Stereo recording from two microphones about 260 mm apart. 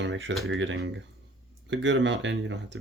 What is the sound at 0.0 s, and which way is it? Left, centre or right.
Speech, right.